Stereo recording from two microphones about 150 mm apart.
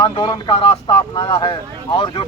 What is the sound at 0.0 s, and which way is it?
Speech, 30° left (ahead or behind).